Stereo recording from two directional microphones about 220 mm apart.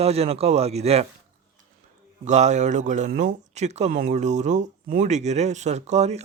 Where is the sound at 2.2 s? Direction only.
30° right (ahead or behind).